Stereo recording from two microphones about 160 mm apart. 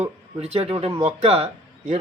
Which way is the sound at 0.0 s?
40° right (ahead or behind).